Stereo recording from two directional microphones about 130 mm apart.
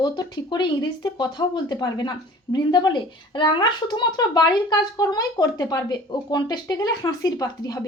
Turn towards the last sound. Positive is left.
turn(degrees=25)  # may be behind; listen again after turning